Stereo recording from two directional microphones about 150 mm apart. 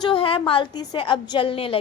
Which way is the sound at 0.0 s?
35° left (ahead or behind).